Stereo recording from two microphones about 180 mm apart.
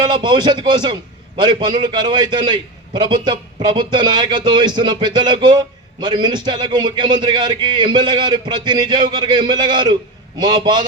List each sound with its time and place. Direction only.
0.0 s a man's voice: 25° right (ahead or behind)